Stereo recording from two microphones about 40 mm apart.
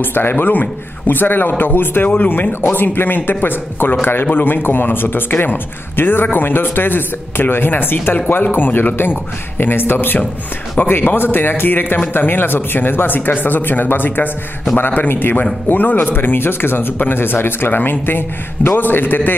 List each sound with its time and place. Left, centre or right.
0.0 s a man's voice: left
15.7 s a man's voice: left